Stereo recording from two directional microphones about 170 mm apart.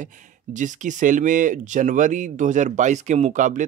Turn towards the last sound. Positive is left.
turn(degrees=-45)  # may be behind; listen again after turning